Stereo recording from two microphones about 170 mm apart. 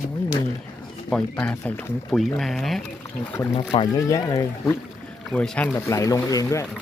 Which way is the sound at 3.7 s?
20° left (ahead or behind).